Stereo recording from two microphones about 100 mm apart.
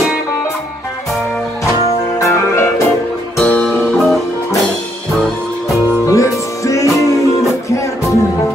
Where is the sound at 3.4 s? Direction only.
10° left (ahead or behind).